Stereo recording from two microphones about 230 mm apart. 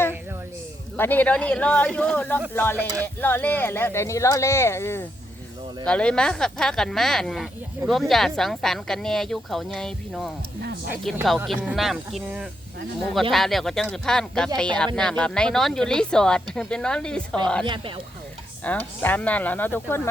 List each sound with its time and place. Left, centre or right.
0.9 s a woman's voice: centre
17.7 s speech: right
18.6 s speech: centre